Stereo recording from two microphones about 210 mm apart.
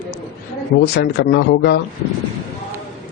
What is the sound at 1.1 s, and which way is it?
Speech, 55° left (ahead or behind).